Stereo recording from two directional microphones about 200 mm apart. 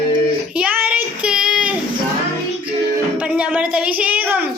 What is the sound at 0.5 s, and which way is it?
Child singing, 5° right (ahead or behind).